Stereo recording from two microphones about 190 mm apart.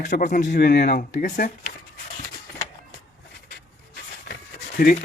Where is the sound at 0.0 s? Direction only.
40° left (ahead or behind).